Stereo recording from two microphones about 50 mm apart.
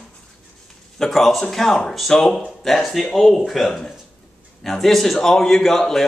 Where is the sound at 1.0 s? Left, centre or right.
Centre.